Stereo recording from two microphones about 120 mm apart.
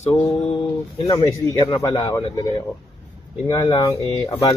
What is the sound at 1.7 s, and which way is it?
Speech, 40° left (ahead or behind).